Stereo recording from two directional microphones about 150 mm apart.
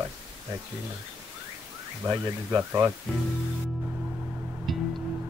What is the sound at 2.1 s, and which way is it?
Speech, 15° right (ahead or behind).